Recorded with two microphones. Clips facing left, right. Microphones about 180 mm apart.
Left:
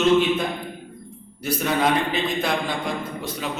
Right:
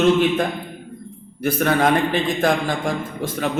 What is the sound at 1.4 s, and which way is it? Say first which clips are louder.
A man's voice: right 4 dB; 55° right (ahead or behind).